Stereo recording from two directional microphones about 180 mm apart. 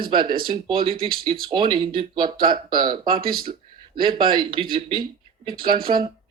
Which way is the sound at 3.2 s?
55° right (ahead or behind).